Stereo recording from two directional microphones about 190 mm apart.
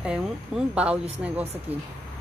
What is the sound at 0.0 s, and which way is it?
Speech, 5° right (ahead or behind).